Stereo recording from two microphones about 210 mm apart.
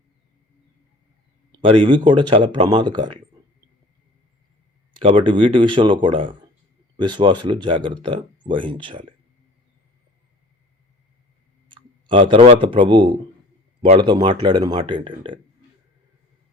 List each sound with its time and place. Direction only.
1.5 s speech: 25° right (ahead or behind)
4.9 s speech: 25° right (ahead or behind)
11.7 s clicking: 25° right (ahead or behind)
12.6 s speech: 25° right (ahead or behind)